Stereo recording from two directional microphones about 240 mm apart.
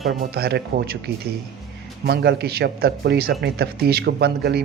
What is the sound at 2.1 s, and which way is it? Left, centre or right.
Speech, right.